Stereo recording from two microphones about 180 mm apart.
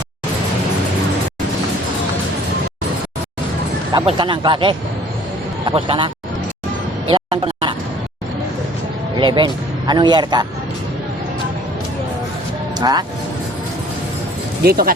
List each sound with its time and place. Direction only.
3.9 s speech: 25° right (ahead or behind)
7.1 s a sound: 30° right (ahead or behind)
9.1 s a man's voice: 25° right (ahead or behind)
12.8 s speech: 25° right (ahead or behind)
14.6 s speech: 60° right (ahead or behind)